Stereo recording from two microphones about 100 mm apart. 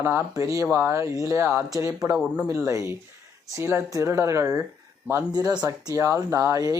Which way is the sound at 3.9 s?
30° right (ahead or behind).